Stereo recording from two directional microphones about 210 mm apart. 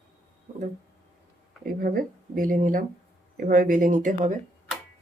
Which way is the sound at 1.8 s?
40° right (ahead or behind).